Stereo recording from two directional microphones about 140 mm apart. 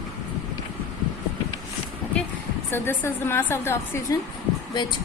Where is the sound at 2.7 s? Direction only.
15° left (ahead or behind).